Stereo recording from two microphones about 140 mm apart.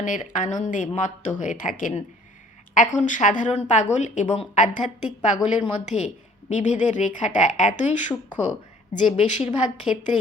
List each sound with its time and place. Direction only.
0.0 s a woman's voice: 65° left (ahead or behind)
9.9 s speech: 5° right (ahead or behind)